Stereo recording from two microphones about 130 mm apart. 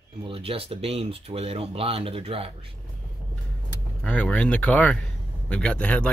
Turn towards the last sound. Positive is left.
turn(degrees=10)  # may be behind; listen again after turning